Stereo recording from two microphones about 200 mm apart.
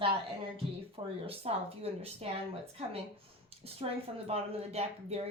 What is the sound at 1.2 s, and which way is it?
Speech, 30° right (ahead or behind).